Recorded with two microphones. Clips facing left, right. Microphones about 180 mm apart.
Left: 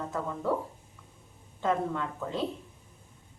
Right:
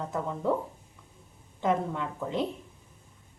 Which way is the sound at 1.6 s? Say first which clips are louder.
Right 1 dB; 15° right (ahead or behind).